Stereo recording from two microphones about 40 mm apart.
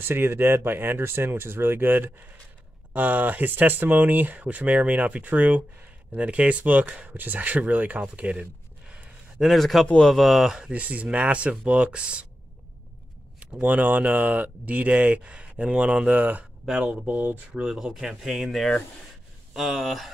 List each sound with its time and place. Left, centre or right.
0.0 s speech: right
7.2 s speech: right
9.5 s speech: centre
10.7 s speech: right
13.6 s speech: right
16.1 s speech: right
17.6 s speech: centre
19.5 s speech: centre